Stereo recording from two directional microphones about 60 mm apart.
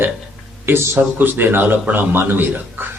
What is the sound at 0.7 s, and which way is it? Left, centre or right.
A man's voice, right.